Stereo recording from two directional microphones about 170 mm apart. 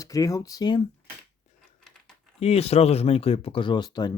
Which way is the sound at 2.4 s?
35° left (ahead or behind).